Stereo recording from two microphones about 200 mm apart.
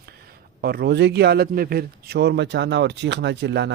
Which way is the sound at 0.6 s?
50° right (ahead or behind).